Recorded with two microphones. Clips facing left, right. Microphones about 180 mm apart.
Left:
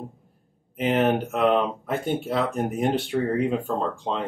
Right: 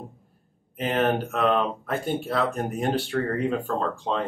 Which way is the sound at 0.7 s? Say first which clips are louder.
Left 2 dB; 20° left (ahead or behind).